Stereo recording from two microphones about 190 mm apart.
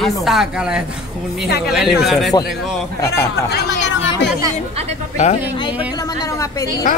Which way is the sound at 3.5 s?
65° left (ahead or behind).